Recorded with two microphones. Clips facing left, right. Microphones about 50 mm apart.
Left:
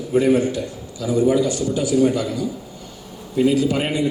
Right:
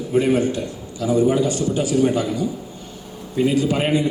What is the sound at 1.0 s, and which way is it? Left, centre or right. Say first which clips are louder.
A man's voice: even; right.